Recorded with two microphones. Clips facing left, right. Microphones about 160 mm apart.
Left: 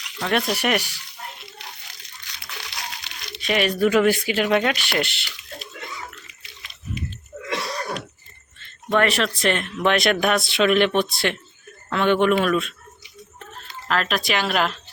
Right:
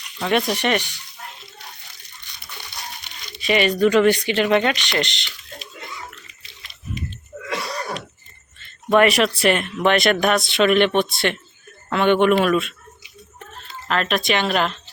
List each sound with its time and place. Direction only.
0.2 s speech: centre (ahead or behind)
2.2 s crumpling: 90° left
3.4 s speech: centre (ahead or behind)
8.9 s speech: 15° right (ahead or behind)
13.8 s speech: centre (ahead or behind)